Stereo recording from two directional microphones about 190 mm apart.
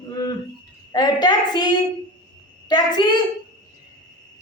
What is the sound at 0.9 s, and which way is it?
Speech, 20° left (ahead or behind).